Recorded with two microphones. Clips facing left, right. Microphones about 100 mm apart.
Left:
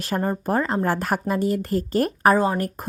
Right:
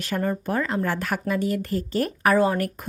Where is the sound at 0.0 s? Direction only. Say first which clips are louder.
Left 1 dB; 35° left (ahead or behind).